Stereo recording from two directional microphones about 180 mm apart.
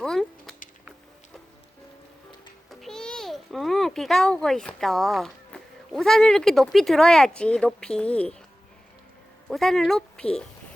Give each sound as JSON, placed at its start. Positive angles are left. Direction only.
{"t": 0.0, "sound": "speech", "side_deg": 5}
{"t": 2.6, "sound": "a child's voice", "side_deg": 0}
{"t": 9.5, "sound": "speech", "side_deg": 0}